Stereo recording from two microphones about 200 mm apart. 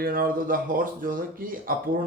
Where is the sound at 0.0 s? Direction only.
45° right (ahead or behind).